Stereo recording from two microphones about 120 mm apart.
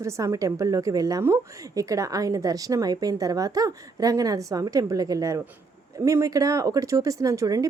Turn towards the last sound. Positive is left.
turn(degrees=-30)  # may be behind; listen again after turning